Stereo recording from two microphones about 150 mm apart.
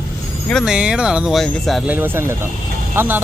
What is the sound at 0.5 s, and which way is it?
Speech, 5° right (ahead or behind).